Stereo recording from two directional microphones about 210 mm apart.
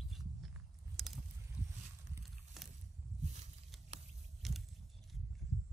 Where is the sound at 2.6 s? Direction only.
Centre (ahead or behind).